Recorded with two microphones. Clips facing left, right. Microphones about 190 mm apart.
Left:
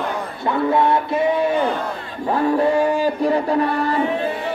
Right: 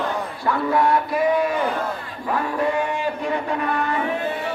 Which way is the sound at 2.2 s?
30° left (ahead or behind).